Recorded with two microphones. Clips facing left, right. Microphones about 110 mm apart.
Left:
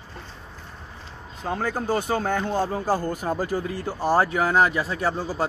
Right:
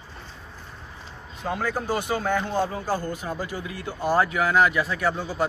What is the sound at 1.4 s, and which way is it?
Speech, 35° left (ahead or behind).